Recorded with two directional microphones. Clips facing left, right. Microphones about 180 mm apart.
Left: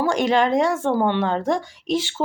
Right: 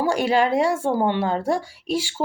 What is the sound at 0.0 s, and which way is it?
Speech, 10° right (ahead or behind).